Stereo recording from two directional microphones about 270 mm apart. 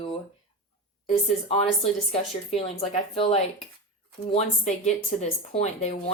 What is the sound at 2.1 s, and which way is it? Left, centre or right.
Speech, left.